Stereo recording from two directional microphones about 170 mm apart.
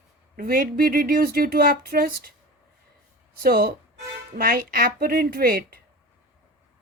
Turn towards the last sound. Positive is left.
turn(degrees=-60)  # may be behind; listen again after turning